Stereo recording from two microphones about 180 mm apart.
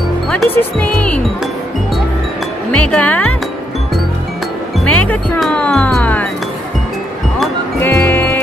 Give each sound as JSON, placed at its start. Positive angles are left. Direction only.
{"t": 0.3, "sound": "speech", "side_deg": 5}
{"t": 2.7, "sound": "speech", "side_deg": 5}
{"t": 4.7, "sound": "speech", "side_deg": 10}
{"t": 7.8, "sound": "music", "side_deg": 10}